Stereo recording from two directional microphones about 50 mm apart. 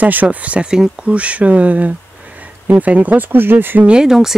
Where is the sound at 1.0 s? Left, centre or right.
Right.